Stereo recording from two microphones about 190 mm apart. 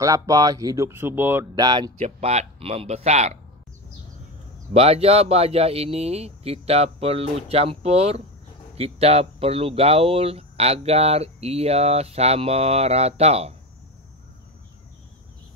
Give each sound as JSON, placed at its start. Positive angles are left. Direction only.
{"t": 0.0, "sound": "speech", "side_deg": -20}
{"t": 1.5, "sound": "speech", "side_deg": -20}
{"t": 2.0, "sound": "speech", "side_deg": -35}
{"t": 4.7, "sound": "speech", "side_deg": -30}